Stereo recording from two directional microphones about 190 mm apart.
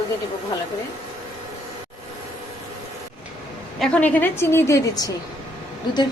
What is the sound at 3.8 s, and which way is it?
A woman's voice, 5° left (ahead or behind).